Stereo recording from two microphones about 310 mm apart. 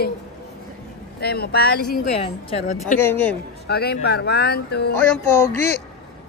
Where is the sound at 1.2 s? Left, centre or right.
Left.